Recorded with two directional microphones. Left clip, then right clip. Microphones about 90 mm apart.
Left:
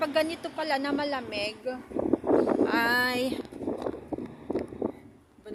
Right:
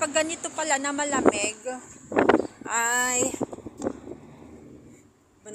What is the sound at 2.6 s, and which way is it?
Wind noise, 85° left.